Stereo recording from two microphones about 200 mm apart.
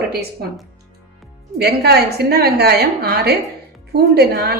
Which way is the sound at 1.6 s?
55° right (ahead or behind).